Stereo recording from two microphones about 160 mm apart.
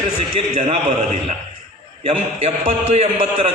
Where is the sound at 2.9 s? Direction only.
40° right (ahead or behind).